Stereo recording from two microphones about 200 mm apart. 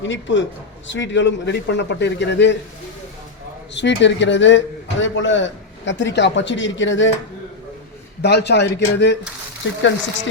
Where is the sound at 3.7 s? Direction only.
60° left (ahead or behind).